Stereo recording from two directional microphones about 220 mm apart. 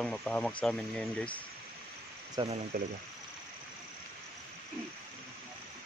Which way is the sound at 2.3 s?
20° right (ahead or behind).